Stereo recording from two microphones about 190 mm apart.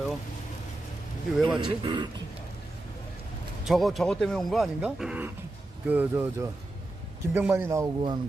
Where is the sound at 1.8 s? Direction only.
25° right (ahead or behind).